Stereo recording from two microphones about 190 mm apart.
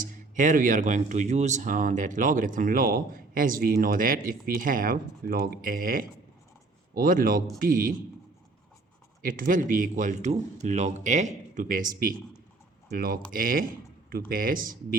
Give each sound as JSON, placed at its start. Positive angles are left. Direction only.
{"t": 0.0, "sound": "speech", "side_deg": -45}
{"t": 9.2, "sound": "speech", "side_deg": -45}